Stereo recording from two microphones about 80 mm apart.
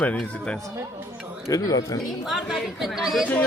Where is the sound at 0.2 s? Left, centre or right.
Centre.